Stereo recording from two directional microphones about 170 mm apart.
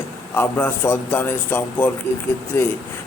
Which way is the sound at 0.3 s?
10° left (ahead or behind).